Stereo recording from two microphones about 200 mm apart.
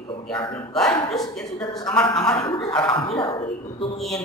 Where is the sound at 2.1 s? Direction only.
5° left (ahead or behind).